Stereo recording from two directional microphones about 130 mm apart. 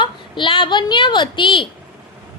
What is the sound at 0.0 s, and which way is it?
A woman's voice, 40° left (ahead or behind).